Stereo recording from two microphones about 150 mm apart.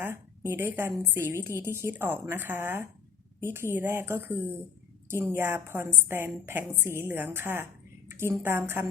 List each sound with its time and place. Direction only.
0.0 s a woman's voice: 15° right (ahead or behind)